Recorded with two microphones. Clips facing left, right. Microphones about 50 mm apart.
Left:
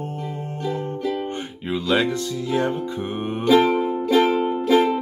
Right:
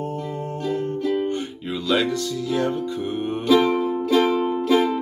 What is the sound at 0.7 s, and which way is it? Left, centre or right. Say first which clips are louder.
Music: right 1 dB; left.